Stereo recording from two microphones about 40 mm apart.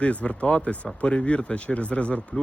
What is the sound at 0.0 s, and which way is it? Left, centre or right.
Speech, left.